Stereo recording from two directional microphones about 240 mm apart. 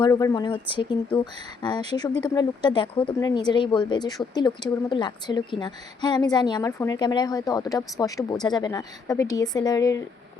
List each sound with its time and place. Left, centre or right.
0.0 s speech: centre